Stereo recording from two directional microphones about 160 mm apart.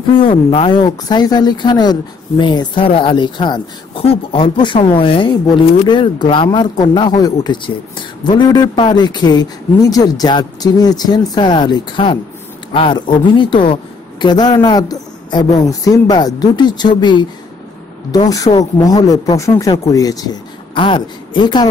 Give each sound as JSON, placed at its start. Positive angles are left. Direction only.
{"t": 0.1, "sound": "speech", "side_deg": 30}
{"t": 18.3, "sound": "speech", "side_deg": 20}